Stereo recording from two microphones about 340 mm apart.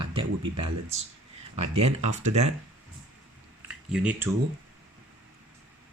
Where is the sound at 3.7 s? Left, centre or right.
Centre.